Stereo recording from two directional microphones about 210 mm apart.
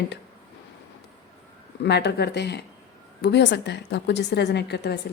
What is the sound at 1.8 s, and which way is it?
A woman's voice, 55° left (ahead or behind).